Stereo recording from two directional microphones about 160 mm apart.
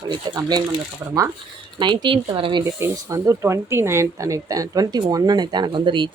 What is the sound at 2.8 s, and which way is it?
Speech, 20° right (ahead or behind).